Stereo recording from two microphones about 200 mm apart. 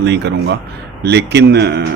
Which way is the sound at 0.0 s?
60° right (ahead or behind).